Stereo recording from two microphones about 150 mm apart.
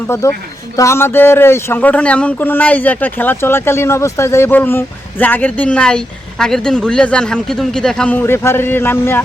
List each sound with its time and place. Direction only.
0.2 s speech: 20° left (ahead or behind)